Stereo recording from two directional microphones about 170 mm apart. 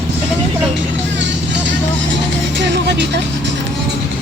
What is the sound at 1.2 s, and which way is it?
Vehicle, 90° right.